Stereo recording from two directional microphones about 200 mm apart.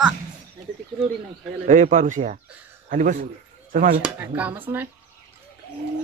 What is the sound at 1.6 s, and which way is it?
A man's voice, 35° right (ahead or behind).